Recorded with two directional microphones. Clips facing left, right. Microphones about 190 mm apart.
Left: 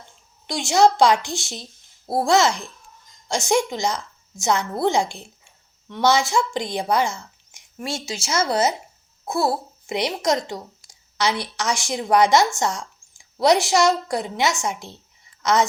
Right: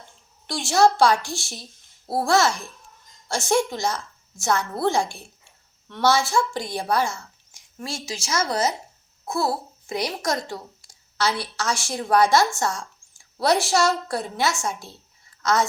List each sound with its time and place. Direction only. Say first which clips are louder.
0.4 s a woman's voice: left 2 dB; 15° left (ahead or behind)